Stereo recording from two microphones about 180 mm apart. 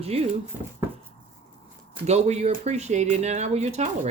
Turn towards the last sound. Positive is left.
turn(degrees=-35)  # may be behind; listen again after turning